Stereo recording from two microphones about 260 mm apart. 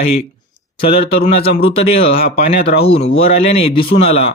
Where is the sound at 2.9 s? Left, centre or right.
Left.